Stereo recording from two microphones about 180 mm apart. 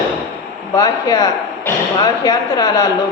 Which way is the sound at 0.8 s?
20° left (ahead or behind).